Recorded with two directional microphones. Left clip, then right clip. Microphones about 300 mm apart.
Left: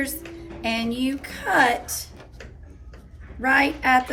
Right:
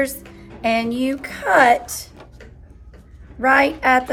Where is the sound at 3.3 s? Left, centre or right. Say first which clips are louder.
Right 5 dB; centre.